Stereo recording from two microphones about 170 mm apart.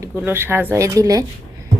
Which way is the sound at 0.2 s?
10° right (ahead or behind).